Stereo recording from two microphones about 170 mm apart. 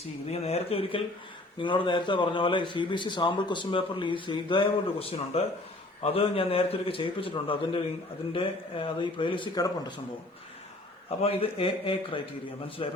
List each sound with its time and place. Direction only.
0.3 s a man's voice: 35° left (ahead or behind)
11.2 s a man's voice: 35° left (ahead or behind)